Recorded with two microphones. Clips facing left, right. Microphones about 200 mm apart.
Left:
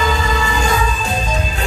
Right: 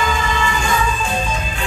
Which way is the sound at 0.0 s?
40° left (ahead or behind).